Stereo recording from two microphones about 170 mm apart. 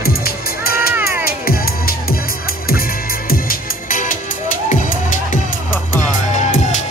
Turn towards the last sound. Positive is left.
turn(degrees=45)  # may be behind; listen again after turning